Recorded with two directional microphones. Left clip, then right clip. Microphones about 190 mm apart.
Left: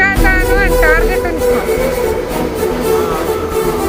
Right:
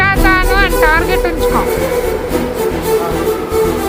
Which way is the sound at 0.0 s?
10° right (ahead or behind).